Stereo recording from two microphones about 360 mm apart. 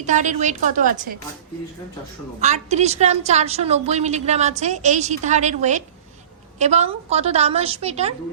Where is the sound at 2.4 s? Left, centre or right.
Centre.